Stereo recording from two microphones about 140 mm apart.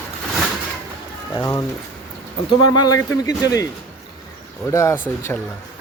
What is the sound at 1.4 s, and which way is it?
Speech, 25° left (ahead or behind).